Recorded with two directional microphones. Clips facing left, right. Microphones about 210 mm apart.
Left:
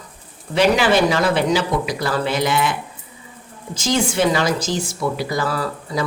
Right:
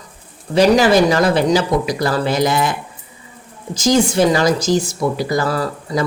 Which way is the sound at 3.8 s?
40° right (ahead or behind).